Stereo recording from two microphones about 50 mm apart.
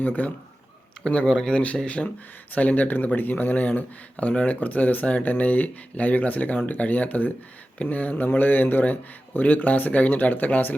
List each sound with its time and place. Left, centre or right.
0.0 s speech: left
1.0 s speech: left